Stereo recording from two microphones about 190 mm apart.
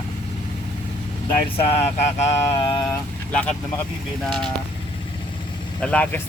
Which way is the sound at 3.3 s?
5° left (ahead or behind).